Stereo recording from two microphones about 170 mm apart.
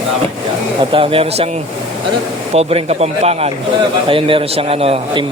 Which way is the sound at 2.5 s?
35° right (ahead or behind).